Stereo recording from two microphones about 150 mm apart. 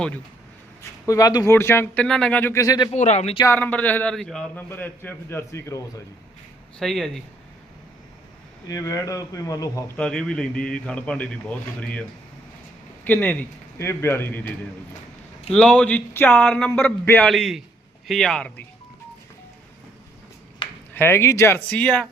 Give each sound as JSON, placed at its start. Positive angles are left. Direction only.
{"t": 1.0, "sound": "a man's voice", "side_deg": 20}
{"t": 2.9, "sound": "speech", "side_deg": 50}
{"t": 3.4, "sound": "a man's voice", "side_deg": 15}
{"t": 4.7, "sound": "a man's voice", "side_deg": 15}
{"t": 6.7, "sound": "speech", "side_deg": 0}
{"t": 8.6, "sound": "speech", "side_deg": 25}
{"t": 10.0, "sound": "a man's voice", "side_deg": 5}
{"t": 13.1, "sound": "a man's voice", "side_deg": 10}
{"t": 15.5, "sound": "a man's voice", "side_deg": 5}
{"t": 20.9, "sound": "a man's voice", "side_deg": 15}